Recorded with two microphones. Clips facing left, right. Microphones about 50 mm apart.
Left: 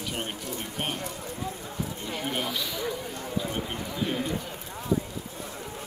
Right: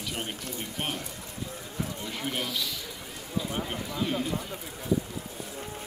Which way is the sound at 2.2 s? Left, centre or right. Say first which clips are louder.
Left 1 dB; centre.